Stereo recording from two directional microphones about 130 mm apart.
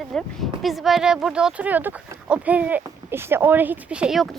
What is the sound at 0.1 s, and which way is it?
Speech, centre (ahead or behind).